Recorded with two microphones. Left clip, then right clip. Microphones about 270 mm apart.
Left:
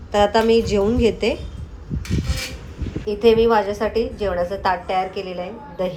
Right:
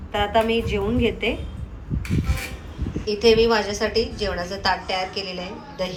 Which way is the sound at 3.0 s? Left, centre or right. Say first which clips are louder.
Left 2 dB; centre.